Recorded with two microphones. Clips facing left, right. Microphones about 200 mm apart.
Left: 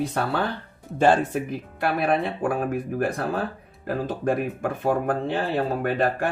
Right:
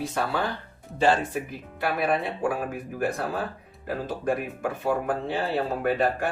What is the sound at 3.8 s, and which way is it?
Speech, 50° left (ahead or behind).